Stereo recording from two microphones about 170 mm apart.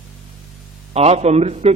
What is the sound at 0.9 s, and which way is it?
Speech, 40° right (ahead or behind).